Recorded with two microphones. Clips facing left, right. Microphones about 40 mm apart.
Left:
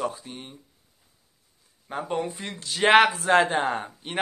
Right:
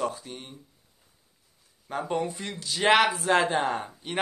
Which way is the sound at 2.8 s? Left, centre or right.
Left.